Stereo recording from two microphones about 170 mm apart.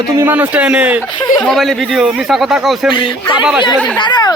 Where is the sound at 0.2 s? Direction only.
10° right (ahead or behind).